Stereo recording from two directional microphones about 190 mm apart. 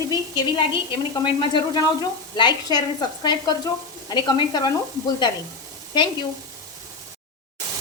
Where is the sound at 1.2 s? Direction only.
25° left (ahead or behind).